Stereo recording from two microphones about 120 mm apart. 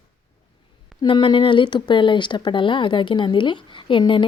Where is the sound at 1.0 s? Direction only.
45° left (ahead or behind).